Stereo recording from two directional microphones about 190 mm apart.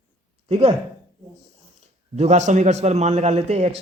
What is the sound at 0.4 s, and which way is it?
Speech, 35° right (ahead or behind).